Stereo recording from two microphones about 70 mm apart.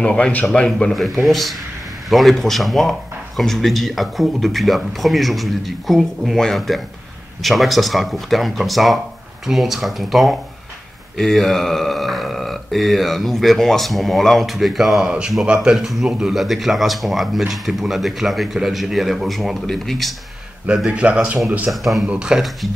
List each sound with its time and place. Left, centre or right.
0.0 s a man's voice: centre
0.9 s speech: centre
15.0 s a man's voice: centre
20.6 s a man's voice: centre
21.6 s speech: centre
22.0 s a man's voice: centre